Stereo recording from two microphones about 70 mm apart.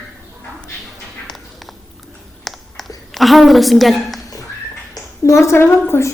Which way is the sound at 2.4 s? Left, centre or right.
Centre.